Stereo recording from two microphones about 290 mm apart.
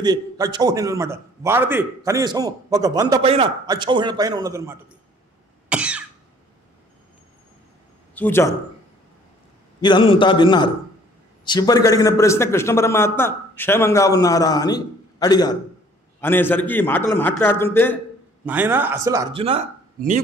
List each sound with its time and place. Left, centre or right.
0.0 s a man's voice: centre
5.7 s cough: centre
8.1 s a man's voice: centre
9.8 s a man's voice: centre
18.4 s a man's voice: centre; by 20.2 s right